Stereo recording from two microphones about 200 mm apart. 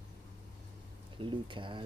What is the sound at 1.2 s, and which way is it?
Speech, 25° right (ahead or behind).